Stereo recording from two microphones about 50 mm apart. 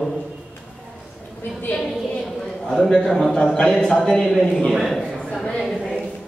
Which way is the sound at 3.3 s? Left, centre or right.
Centre.